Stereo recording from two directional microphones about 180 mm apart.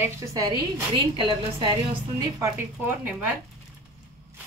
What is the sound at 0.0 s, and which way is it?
A woman's voice, 15° right (ahead or behind).